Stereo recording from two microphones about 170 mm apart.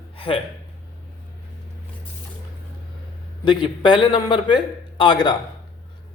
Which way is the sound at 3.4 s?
30° left (ahead or behind).